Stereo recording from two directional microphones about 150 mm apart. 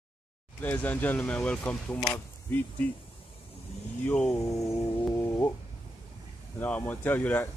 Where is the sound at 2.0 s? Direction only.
20° left (ahead or behind).